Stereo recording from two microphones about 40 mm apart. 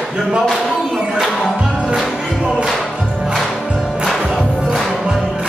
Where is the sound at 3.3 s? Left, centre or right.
Centre.